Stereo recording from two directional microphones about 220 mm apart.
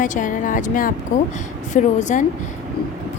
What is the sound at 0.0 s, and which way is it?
Speech, 35° left (ahead or behind).